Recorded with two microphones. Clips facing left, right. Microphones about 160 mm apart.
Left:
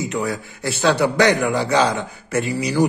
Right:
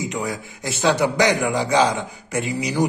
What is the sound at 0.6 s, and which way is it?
A man's voice, 15° right (ahead or behind).